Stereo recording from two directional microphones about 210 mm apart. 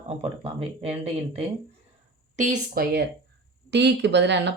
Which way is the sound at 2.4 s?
40° right (ahead or behind).